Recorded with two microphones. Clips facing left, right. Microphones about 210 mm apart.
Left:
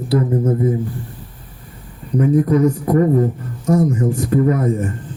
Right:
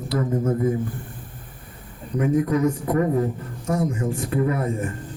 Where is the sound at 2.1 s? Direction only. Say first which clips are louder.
Left 6 dB; 35° left (ahead or behind).